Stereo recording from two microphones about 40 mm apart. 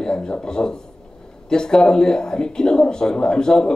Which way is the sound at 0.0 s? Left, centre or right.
Centre.